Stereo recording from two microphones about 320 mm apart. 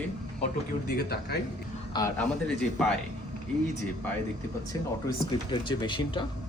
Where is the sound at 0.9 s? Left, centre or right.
Left.